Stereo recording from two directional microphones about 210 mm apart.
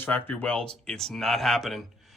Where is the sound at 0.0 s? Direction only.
10° left (ahead or behind).